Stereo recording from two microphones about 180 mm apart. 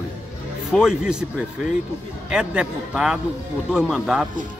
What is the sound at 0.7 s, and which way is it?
Speech, centre (ahead or behind).